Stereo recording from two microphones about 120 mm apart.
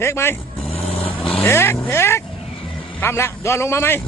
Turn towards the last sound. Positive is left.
turn(degrees=20)  # may be behind; listen again after turning